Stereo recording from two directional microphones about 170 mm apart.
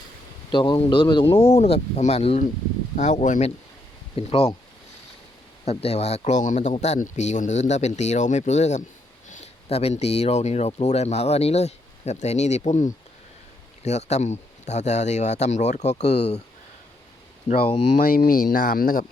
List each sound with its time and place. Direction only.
0.5 s speech: 30° left (ahead or behind); by 3.5 s 45° left (ahead or behind)
4.1 s speech: 35° left (ahead or behind)
5.6 s speech: 40° left (ahead or behind)
18.0 s speech: 55° left (ahead or behind)